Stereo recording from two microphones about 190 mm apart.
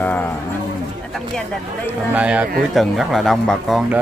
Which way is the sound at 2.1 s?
5° right (ahead or behind).